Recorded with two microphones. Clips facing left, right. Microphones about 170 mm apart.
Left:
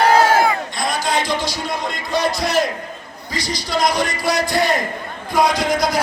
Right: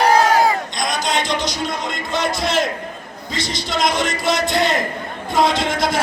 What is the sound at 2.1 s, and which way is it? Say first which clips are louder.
A man's voice: left 2 dB; 25° right (ahead or behind).